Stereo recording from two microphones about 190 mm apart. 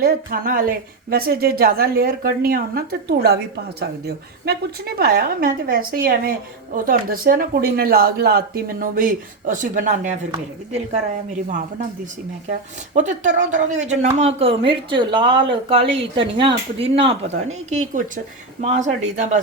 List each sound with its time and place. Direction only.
0.0 s a woman's voice: 50° right (ahead or behind)
12.5 s speech: 40° right (ahead or behind)